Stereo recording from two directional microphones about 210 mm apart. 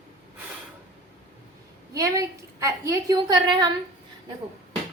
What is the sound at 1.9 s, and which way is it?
A woman's voice, 15° right (ahead or behind).